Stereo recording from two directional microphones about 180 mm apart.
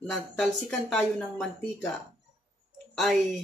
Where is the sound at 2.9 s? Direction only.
Centre (ahead or behind).